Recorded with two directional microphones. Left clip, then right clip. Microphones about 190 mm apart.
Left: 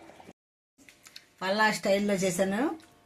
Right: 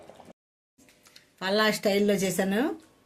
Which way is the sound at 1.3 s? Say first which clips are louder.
Right 1 dB; 35° right (ahead or behind).